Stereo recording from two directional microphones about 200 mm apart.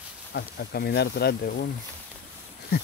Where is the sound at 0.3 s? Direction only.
55° left (ahead or behind).